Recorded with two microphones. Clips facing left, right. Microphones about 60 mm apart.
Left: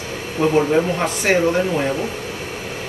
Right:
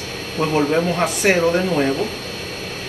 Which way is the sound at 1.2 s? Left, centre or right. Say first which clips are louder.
Even; centre.